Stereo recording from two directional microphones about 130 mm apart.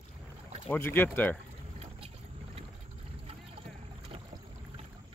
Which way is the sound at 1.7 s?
55° right (ahead or behind).